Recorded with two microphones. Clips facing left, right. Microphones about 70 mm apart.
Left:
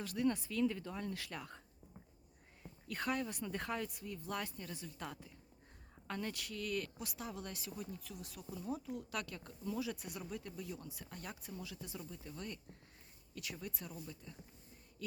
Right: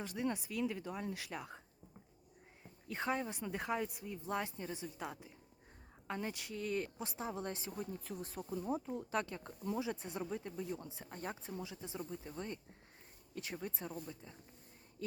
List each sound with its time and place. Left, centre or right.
0.0 s speech: right
2.8 s speech: right